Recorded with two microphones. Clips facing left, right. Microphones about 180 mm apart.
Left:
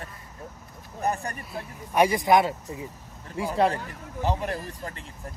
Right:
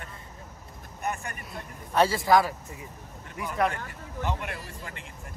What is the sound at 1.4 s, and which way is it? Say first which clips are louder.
Speech: left 4 dB; centre (ahead or behind).